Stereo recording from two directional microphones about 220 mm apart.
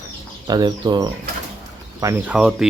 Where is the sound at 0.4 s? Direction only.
20° right (ahead or behind).